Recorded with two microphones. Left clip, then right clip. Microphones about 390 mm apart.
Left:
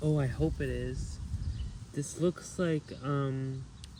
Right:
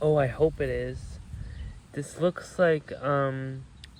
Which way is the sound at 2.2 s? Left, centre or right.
Centre.